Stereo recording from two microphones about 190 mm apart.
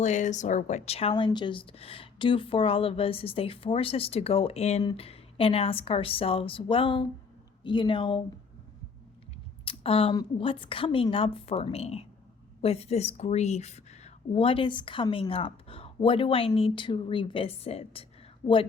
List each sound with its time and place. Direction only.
0.0 s a woman's voice: 40° left (ahead or behind)
9.6 s a woman's voice: 30° left (ahead or behind)